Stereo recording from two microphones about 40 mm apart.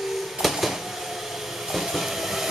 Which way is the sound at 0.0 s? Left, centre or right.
Centre.